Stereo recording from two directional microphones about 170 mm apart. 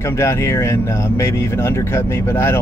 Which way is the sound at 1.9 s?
15° left (ahead or behind).